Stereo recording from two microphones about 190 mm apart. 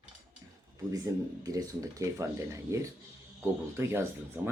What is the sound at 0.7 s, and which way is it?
Speech, 20° right (ahead or behind).